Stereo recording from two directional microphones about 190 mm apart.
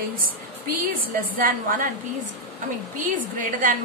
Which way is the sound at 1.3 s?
50° right (ahead or behind).